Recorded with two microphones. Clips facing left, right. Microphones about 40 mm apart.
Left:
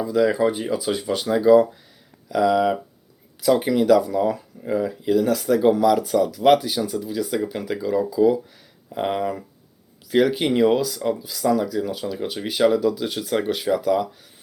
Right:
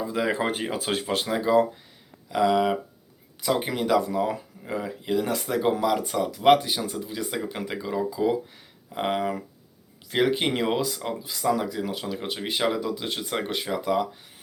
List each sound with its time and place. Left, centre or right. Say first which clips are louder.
0.0 s speech: left 8 dB; right
0.3 s speech: left 5 dB; right
1.3 s speech: left 7 dB; centre